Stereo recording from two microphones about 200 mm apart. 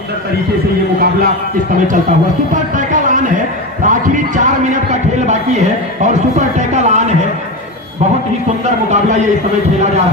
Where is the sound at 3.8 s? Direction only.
40° right (ahead or behind).